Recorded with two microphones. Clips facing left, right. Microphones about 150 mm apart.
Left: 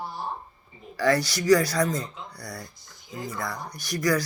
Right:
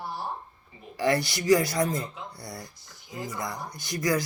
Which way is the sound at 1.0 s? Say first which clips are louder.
Left 2 dB; 20° right (ahead or behind).